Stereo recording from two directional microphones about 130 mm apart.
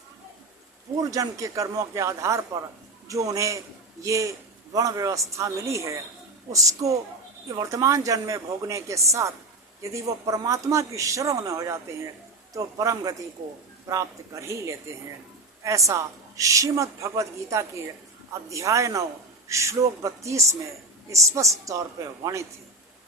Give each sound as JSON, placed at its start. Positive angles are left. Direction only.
{"t": 0.9, "sound": "a man's voice", "side_deg": -25}